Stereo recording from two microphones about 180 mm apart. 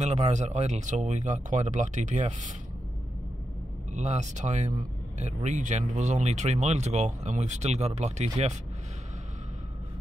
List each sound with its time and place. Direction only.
0.0 s speech: 40° right (ahead or behind)
3.9 s speech: 40° right (ahead or behind)